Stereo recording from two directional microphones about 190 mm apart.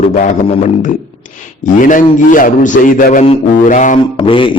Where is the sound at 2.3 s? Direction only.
45° left (ahead or behind).